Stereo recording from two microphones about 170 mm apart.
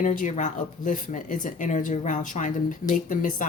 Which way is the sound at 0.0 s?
50° left (ahead or behind).